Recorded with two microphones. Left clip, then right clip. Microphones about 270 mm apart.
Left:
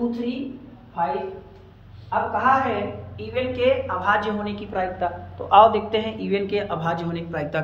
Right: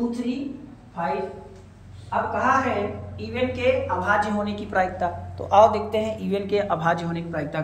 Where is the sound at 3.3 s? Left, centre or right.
Centre.